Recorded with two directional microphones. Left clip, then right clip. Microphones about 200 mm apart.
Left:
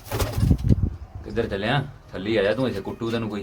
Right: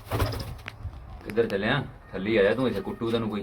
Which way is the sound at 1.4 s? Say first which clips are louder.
Left 1 dB; 10° left (ahead or behind).